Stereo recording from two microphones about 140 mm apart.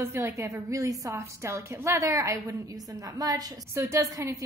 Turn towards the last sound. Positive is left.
turn(degrees=-25)  # may be behind; listen again after turning